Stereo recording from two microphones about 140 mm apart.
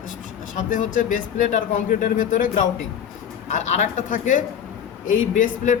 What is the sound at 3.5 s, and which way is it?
A man's voice, 60° left (ahead or behind).